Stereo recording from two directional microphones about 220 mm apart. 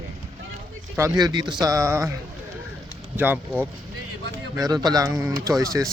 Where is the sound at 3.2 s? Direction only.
5° right (ahead or behind).